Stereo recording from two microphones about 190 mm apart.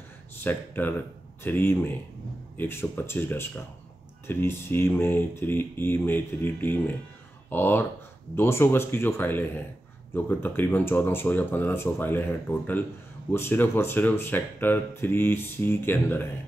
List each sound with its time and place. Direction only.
0.4 s speech: 10° left (ahead or behind)